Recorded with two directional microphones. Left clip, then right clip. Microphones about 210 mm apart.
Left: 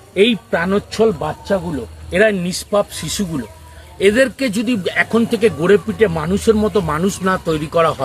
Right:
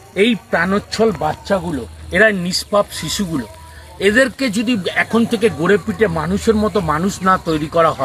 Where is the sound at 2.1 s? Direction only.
15° left (ahead or behind).